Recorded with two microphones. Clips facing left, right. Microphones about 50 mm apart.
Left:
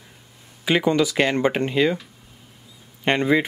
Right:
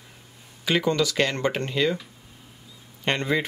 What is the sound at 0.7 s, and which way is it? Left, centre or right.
Speech, centre.